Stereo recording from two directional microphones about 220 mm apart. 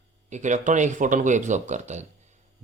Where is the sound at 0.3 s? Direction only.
35° right (ahead or behind).